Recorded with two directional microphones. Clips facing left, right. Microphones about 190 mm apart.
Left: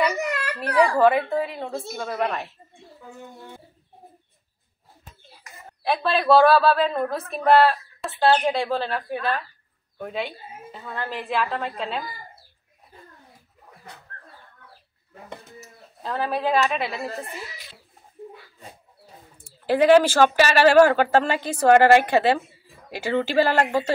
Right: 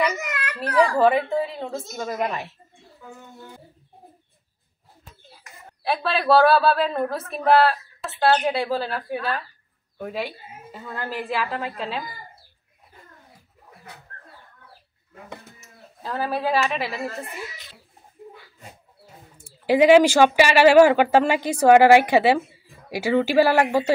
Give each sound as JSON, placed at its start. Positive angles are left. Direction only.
{"t": 0.0, "sound": "baby cry", "side_deg": 30}
{"t": 2.0, "sound": "speech", "side_deg": -15}
{"t": 5.9, "sound": "a woman's voice", "side_deg": -5}
{"t": 16.0, "sound": "a woman's voice", "side_deg": -5}
{"t": 19.6, "sound": "speech", "side_deg": -10}